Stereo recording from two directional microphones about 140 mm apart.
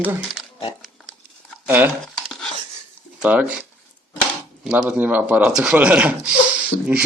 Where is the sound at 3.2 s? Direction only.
10° right (ahead or behind).